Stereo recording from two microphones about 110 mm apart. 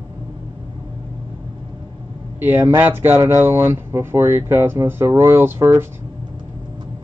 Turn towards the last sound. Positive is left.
turn(degrees=-25)  # may be behind; listen again after turning